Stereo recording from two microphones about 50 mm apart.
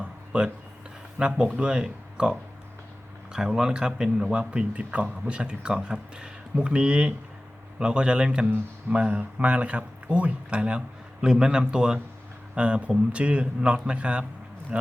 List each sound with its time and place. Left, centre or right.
0.0 s a sound: centre
1.2 s speech: centre
3.3 s speech: centre